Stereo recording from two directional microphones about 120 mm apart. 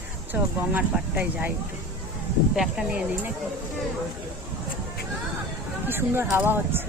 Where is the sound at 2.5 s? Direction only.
5° right (ahead or behind).